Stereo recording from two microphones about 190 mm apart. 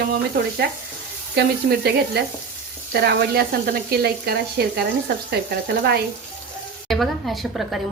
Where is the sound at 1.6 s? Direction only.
55° right (ahead or behind).